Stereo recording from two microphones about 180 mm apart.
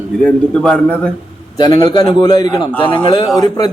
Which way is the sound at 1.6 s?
25° left (ahead or behind).